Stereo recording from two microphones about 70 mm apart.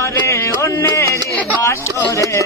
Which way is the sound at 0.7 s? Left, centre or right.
Left.